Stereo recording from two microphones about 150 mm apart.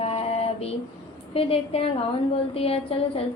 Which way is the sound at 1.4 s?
40° left (ahead or behind).